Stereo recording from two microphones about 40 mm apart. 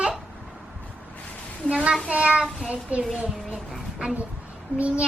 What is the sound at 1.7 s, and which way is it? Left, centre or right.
Speech, right.